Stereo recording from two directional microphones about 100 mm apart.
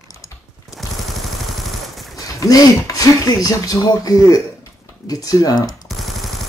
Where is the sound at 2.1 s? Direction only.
35° left (ahead or behind).